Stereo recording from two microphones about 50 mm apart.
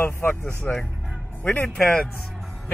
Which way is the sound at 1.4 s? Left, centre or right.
Left.